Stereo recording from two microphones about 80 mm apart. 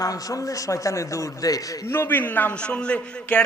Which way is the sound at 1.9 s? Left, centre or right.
Left.